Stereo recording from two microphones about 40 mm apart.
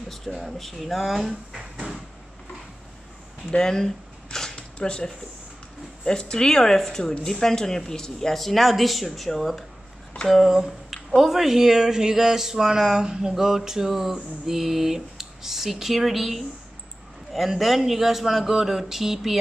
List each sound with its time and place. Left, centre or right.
0.1 s speech: centre
1.3 s speech: centre
3.5 s camera: centre
4.6 s zipper: left
6.0 s speech: centre
10.4 s a sound: centre
11.1 s speech: centre